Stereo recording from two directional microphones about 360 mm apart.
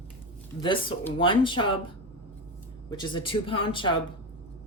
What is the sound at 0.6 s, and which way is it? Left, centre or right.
Speech, centre.